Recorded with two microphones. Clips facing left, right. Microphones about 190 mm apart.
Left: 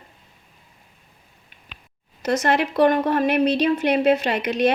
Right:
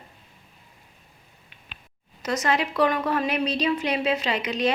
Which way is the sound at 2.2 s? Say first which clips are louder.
Left 4 dB; 60° left (ahead or behind).